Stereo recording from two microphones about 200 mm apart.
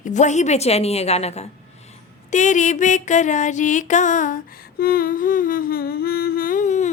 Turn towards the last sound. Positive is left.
turn(degrees=35)  # may be behind; listen again after turning